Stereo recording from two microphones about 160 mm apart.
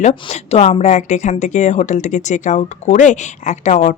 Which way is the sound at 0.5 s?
45° left (ahead or behind).